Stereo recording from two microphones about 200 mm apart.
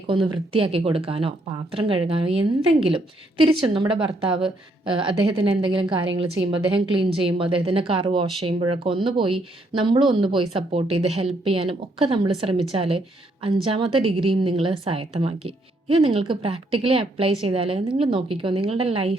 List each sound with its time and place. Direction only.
0.1 s a woman's voice: 25° right (ahead or behind)